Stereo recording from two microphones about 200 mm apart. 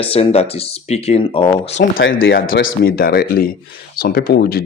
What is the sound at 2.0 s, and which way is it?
Speech, 75° left (ahead or behind).